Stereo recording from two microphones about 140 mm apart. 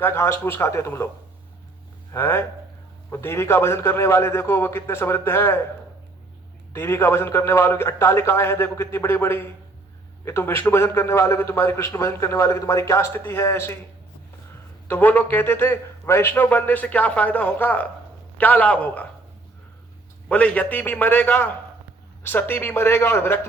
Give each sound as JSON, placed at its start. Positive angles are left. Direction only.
{"t": 0.0, "sound": "a man's voice", "side_deg": 20}
{"t": 2.1, "sound": "a man's voice", "side_deg": 15}
{"t": 6.7, "sound": "a man's voice", "side_deg": 20}
{"t": 14.8, "sound": "a man's voice", "side_deg": 10}
{"t": 20.2, "sound": "a man's voice", "side_deg": 10}